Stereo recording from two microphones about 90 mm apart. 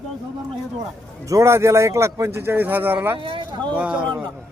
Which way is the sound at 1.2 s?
35° right (ahead or behind).